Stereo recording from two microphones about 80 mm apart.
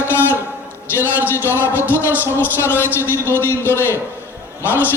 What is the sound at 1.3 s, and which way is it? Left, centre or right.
A man's voice, left.